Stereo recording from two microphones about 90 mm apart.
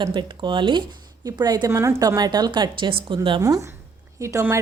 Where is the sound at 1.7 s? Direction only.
35° right (ahead or behind); by 3.4 s 65° right (ahead or behind).